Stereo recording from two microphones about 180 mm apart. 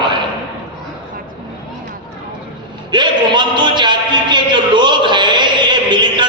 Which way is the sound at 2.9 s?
25° right (ahead or behind).